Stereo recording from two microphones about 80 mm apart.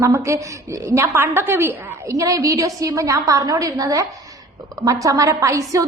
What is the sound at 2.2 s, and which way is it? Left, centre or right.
A woman's voice, right.